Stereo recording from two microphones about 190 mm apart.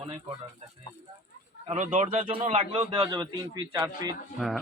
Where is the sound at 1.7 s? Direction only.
40° right (ahead or behind).